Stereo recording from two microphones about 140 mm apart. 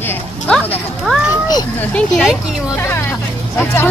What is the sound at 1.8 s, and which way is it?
Speech, 10° left (ahead or behind).